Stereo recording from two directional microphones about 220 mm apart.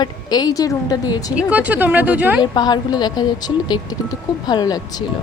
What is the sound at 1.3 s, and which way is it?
Speech, 5° right (ahead or behind).